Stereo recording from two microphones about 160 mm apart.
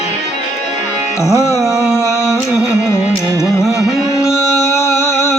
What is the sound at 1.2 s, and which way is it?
Music, 20° left (ahead or behind).